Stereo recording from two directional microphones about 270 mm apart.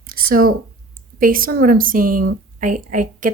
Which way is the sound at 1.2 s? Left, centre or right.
Right.